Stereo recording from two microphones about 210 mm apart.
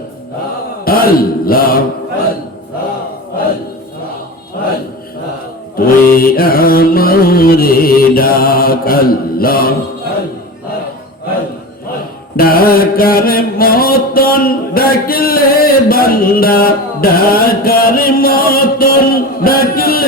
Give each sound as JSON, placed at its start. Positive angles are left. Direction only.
{"t": 0.9, "sound": "mantra", "side_deg": 45}
{"t": 5.7, "sound": "mantra", "side_deg": 45}
{"t": 12.4, "sound": "mantra", "side_deg": 45}